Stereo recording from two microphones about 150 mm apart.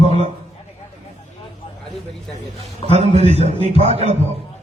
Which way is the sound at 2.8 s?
45° right (ahead or behind).